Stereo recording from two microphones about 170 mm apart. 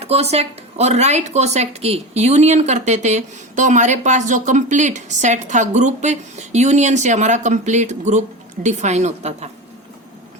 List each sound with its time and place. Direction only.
0.0 s a woman's voice: 35° right (ahead or behind)